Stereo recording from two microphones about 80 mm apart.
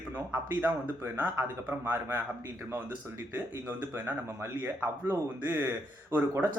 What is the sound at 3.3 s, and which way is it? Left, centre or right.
A man's voice, right.